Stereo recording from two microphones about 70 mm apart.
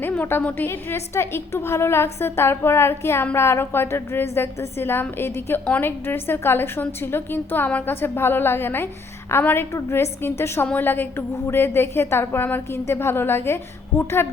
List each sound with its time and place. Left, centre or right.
0.0 s a woman's voice: left
9.7 s a woman's voice: left